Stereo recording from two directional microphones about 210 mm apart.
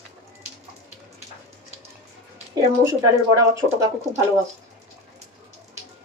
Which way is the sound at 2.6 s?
15° right (ahead or behind).